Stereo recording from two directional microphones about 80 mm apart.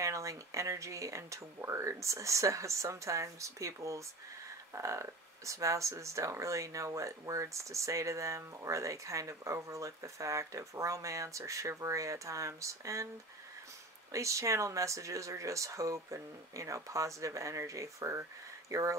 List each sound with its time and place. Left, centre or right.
0.0 s speech: right
14.1 s speech: right